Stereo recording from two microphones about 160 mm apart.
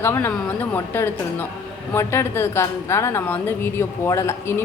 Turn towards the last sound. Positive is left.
turn(degrees=15)  # may be behind; listen again after turning